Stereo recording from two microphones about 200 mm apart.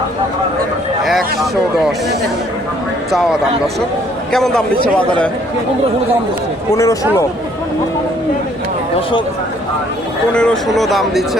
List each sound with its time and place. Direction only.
1.0 s speech: centre (ahead or behind)
3.1 s speech: centre (ahead or behind)
6.7 s speech: 15° left (ahead or behind)
10.3 s speech: 5° left (ahead or behind)